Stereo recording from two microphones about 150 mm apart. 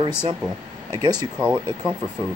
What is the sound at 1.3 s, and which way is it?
Speech, 5° right (ahead or behind).